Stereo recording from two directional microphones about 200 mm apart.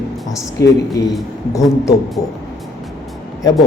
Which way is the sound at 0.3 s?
20° left (ahead or behind).